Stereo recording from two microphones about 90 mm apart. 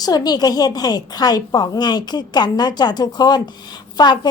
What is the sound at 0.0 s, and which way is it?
A woman's voice, 45° left (ahead or behind).